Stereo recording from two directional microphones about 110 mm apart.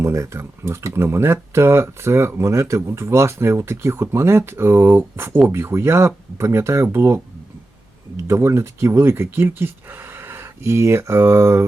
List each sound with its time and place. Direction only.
0.0 s speech: 25° right (ahead or behind)